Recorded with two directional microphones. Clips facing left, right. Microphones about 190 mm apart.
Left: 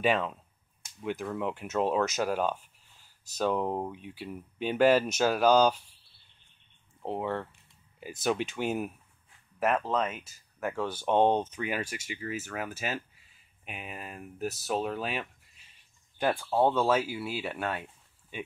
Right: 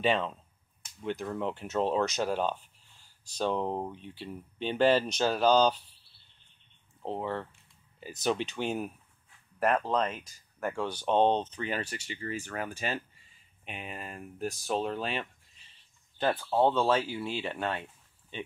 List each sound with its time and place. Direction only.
0.0 s speech: 5° left (ahead or behind)
7.0 s speech: 10° left (ahead or behind)